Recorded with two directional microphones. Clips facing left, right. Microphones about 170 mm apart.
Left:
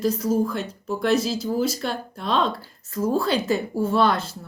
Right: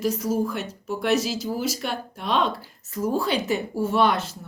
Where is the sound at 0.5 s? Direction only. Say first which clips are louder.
Left 2 dB; 35° left (ahead or behind).